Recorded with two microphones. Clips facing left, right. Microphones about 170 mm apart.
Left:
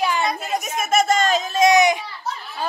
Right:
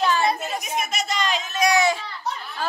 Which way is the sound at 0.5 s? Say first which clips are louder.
Left 7 dB; 45° left (ahead or behind).